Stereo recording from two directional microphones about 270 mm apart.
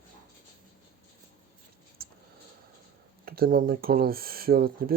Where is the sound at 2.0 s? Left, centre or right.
Right.